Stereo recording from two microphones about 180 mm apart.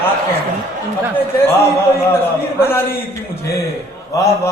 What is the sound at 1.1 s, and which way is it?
A man's voice, 15° left (ahead or behind).